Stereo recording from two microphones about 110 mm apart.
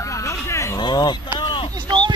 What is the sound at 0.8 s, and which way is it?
Speech, 40° left (ahead or behind).